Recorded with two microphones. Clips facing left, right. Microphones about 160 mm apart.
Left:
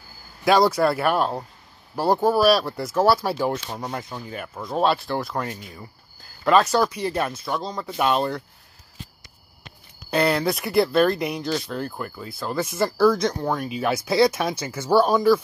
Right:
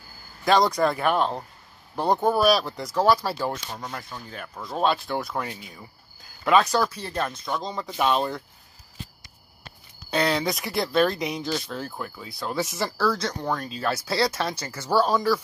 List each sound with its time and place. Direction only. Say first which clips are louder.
0.5 s speech: left 3 dB; 5° left (ahead or behind)
3.8 s speech: left 5 dB; 25° left (ahead or behind)
4.3 s speech: left 4 dB; 5° left (ahead or behind)
6.8 s speech: left 4 dB; 15° left (ahead or behind)
10.1 s speech: left 3 dB; 5° left (ahead or behind)
12.9 s speech: left 8 dB; 10° left (ahead or behind)